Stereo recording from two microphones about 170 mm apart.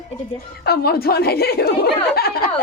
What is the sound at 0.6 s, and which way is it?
Speech, 65° left (ahead or behind).